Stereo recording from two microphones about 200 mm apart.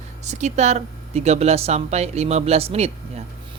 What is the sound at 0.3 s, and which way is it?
Speech, 35° right (ahead or behind).